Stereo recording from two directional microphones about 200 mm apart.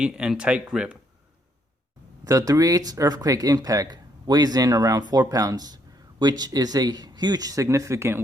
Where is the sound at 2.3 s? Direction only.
15° right (ahead or behind).